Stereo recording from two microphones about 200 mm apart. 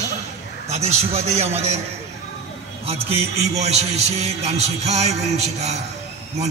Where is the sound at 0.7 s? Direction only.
35° right (ahead or behind).